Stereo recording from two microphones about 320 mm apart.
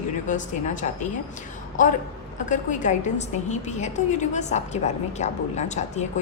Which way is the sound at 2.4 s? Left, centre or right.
Left.